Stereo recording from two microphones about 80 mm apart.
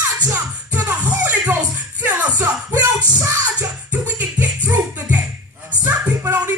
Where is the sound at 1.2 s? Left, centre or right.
Right.